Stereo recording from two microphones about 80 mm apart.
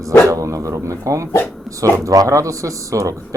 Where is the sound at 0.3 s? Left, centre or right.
Right.